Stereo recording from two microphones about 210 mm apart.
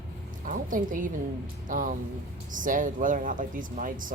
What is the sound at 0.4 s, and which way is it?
Speech, 40° right (ahead or behind).